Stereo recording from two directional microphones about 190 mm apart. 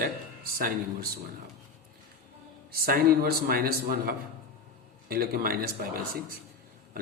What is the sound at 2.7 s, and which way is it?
A man's voice, 55° right (ahead or behind).